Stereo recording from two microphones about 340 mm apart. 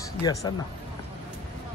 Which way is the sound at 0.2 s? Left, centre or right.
Centre.